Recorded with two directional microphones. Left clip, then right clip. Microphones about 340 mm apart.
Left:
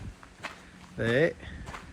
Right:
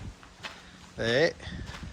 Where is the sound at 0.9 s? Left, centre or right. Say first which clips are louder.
Right 1 dB; centre.